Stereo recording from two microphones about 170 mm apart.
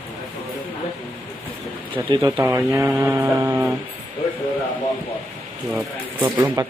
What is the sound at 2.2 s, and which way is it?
Speech, 15° right (ahead or behind).